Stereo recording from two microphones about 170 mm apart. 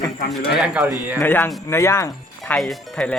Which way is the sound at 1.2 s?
10° left (ahead or behind).